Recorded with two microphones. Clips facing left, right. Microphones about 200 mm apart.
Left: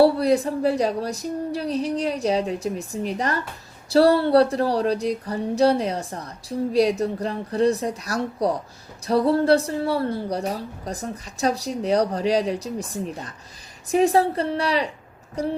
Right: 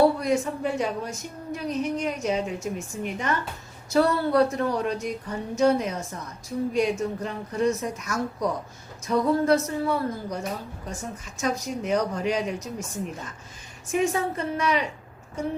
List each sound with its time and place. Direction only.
0.0 s a woman's voice: 35° left (ahead or behind)